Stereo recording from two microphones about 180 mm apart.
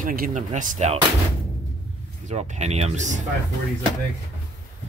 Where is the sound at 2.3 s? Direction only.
40° right (ahead or behind).